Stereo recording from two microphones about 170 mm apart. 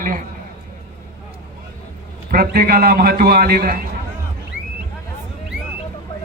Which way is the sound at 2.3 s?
60° right (ahead or behind).